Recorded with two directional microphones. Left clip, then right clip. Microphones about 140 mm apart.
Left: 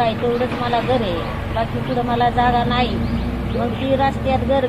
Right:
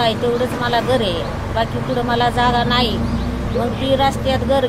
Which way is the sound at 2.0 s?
20° right (ahead or behind).